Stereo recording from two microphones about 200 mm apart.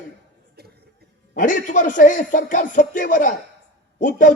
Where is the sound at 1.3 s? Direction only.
40° left (ahead or behind).